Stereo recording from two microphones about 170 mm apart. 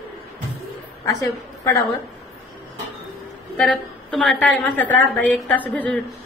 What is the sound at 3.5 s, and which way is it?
A woman's voice, 5° left (ahead or behind).